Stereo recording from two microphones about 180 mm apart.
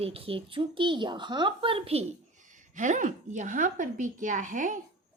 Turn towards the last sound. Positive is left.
turn(degrees=-45)  # may be behind; listen again after turning